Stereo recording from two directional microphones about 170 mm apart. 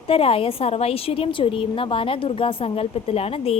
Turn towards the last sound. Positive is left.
turn(degrees=35)  # may be behind; listen again after turning